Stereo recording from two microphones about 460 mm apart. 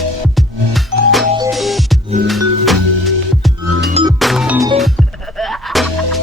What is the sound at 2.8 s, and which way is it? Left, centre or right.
Music, right.